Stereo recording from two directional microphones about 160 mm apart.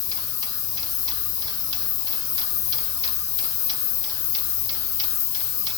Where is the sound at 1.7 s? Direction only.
25° right (ahead or behind).